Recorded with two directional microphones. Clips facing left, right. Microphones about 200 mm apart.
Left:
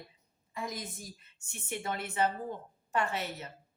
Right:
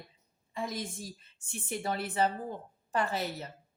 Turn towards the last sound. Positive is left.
turn(degrees=-35)  # may be behind; listen again after turning